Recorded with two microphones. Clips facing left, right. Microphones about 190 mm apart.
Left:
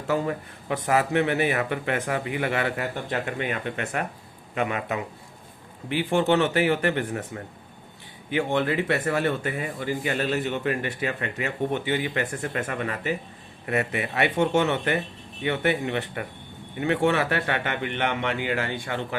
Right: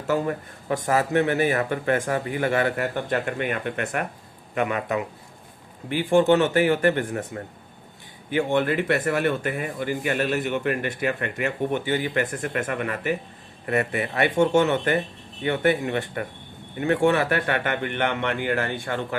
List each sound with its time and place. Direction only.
0.1 s speech: 45° right (ahead or behind)